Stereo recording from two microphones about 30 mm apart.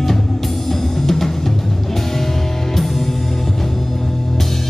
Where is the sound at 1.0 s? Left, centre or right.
Centre.